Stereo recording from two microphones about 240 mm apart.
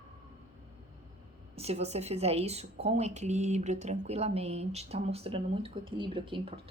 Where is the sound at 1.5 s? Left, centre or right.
Right.